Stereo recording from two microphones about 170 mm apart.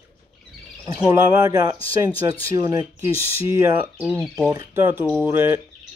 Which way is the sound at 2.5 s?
20° right (ahead or behind).